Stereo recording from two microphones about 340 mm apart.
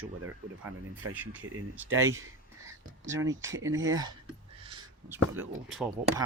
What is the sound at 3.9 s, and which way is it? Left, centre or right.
Speech, centre.